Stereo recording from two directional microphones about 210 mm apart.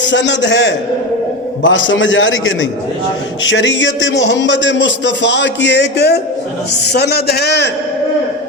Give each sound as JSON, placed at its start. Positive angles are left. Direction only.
{"t": 0.0, "sound": "a man's voice", "side_deg": 60}